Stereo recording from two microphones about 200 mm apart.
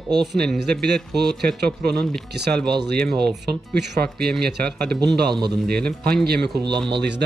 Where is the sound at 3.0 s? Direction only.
5° left (ahead or behind).